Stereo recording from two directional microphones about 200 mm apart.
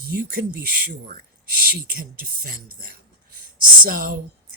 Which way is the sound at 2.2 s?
50° right (ahead or behind).